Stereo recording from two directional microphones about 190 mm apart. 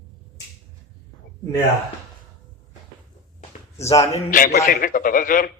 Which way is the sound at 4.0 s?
40° left (ahead or behind).